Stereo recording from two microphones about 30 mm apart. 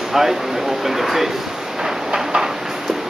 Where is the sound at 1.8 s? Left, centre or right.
Centre.